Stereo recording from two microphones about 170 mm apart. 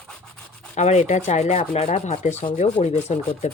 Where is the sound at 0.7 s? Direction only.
45° left (ahead or behind).